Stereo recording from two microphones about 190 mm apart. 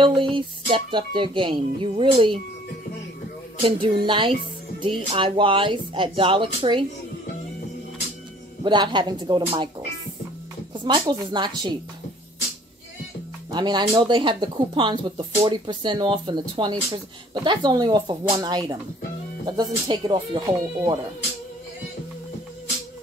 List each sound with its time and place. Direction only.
0.0 s speech: 25° right (ahead or behind)
3.6 s speech: 30° right (ahead or behind)
8.6 s speech: 25° right (ahead or behind)
10.7 s speech: 25° right (ahead or behind)
13.5 s speech: 20° right (ahead or behind)